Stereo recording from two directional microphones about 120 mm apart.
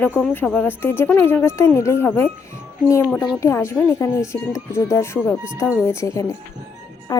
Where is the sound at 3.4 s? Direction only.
25° left (ahead or behind).